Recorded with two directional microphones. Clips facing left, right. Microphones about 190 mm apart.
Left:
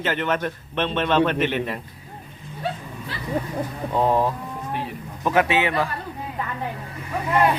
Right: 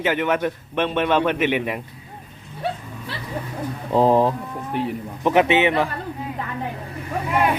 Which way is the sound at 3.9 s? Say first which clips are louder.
Right 5 dB; 30° right (ahead or behind).